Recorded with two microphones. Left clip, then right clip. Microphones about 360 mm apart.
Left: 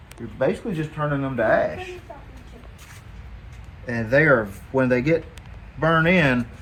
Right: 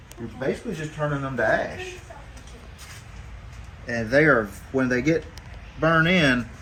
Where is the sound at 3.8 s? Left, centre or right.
Left.